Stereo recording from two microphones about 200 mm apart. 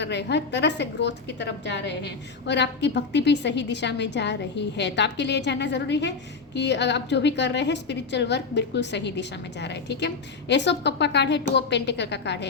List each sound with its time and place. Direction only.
0.0 s a woman's voice: 60° left (ahead or behind)